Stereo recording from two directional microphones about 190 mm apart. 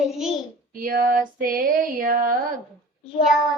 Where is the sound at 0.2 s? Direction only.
Centre (ahead or behind).